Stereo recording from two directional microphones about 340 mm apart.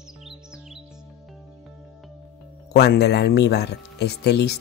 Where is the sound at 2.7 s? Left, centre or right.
Left.